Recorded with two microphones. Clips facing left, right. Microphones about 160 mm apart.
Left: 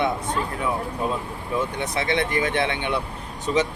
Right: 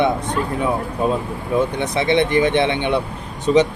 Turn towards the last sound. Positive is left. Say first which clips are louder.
# right 8 dB
turn(degrees=-25)  # may be behind; listen again after turning